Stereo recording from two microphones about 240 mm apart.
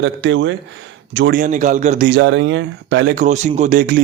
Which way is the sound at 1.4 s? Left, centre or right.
Right.